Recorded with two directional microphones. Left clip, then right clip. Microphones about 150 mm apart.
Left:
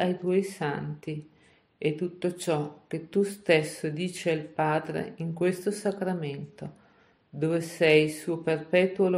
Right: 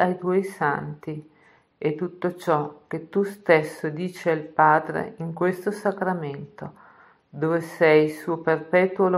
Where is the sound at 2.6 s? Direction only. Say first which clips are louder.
Right 4 dB; 10° left (ahead or behind).